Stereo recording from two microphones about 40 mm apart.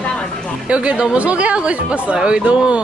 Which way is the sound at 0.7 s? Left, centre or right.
Right.